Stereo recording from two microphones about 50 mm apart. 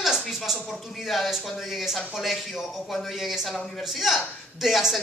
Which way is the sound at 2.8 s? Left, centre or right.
Centre.